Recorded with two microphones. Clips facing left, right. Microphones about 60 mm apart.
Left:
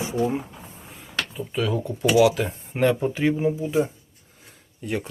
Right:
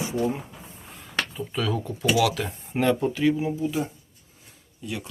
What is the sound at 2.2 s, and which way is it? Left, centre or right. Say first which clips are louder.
Speech: left 9 dB; centre.